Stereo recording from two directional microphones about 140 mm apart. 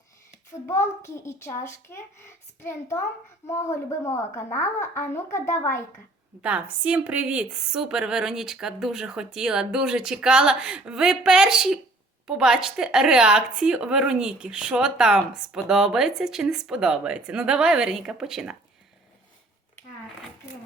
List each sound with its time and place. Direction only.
0.7 s a woman's voice: 20° left (ahead or behind)
6.4 s speech: 10° right (ahead or behind)